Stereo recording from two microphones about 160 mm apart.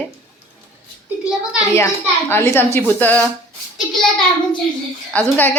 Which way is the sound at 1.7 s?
15° left (ahead or behind).